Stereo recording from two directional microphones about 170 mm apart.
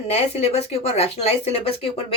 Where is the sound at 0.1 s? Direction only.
40° left (ahead or behind).